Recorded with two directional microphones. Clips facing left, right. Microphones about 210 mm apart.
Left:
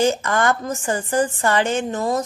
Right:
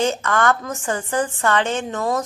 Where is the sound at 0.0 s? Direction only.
10° left (ahead or behind).